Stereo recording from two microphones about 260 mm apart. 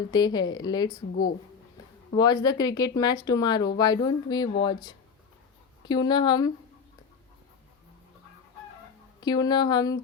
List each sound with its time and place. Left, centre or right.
0.1 s speech: centre
2.1 s speech: centre
9.2 s speech: centre